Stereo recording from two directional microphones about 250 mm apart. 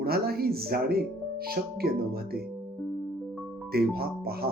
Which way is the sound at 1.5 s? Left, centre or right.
Right.